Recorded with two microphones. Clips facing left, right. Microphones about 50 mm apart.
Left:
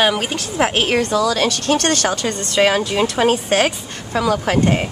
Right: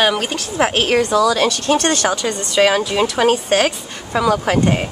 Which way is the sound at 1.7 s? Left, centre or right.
Centre.